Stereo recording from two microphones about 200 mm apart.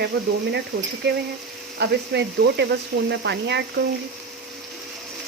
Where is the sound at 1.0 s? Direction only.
60° right (ahead or behind).